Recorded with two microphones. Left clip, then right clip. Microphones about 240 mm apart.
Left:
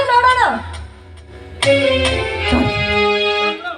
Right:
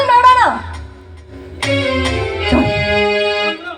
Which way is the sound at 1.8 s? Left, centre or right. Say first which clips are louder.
Left 2 dB; centre.